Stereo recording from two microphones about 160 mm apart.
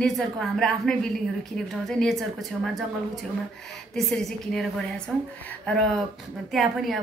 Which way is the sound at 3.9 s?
Centre (ahead or behind).